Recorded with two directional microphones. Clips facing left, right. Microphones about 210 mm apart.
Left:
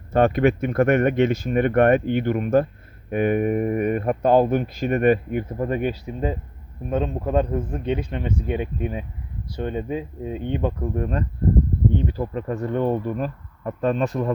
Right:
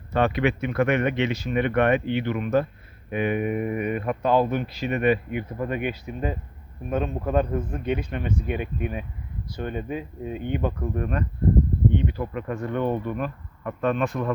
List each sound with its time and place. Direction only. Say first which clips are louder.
0.1 s speech: left 5 dB; 45° left (ahead or behind)
6.9 s speech: left 2 dB; 20° left (ahead or behind)
11.9 s speech: left 2 dB; 35° left (ahead or behind)